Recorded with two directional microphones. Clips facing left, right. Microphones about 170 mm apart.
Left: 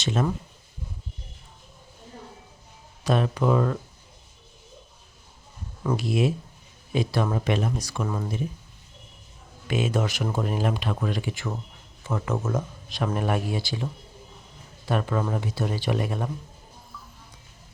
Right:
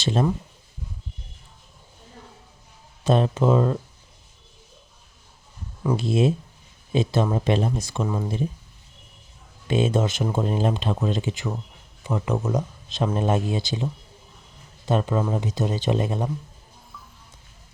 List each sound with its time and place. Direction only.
0.0 s speech: 30° right (ahead or behind)
3.0 s speech: 25° right (ahead or behind)
6.0 s speech: 25° right (ahead or behind)
8.0 s speech: 10° right (ahead or behind)
9.6 s speech: 30° right (ahead or behind)